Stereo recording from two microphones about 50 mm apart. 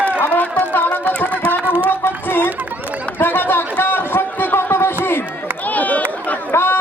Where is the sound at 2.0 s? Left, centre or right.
Left.